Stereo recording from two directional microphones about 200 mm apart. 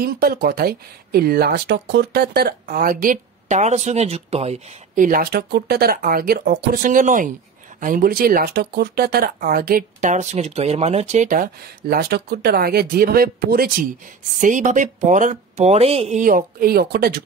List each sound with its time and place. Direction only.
0.0 s speech: 50° right (ahead or behind)
14.4 s speech: 40° right (ahead or behind)